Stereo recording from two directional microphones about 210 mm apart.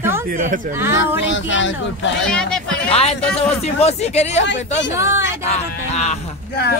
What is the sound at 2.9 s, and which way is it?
Speech, 30° left (ahead or behind).